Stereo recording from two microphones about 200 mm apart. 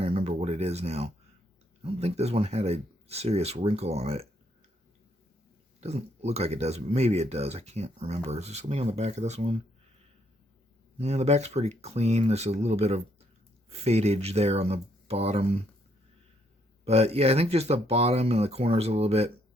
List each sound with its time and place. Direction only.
0.0 s a sound: 30° right (ahead or behind)
1.8 s speech: 30° right (ahead or behind)
5.8 s speech: 30° right (ahead or behind)
10.9 s speech: 30° right (ahead or behind)
16.8 s speech: 30° right (ahead or behind)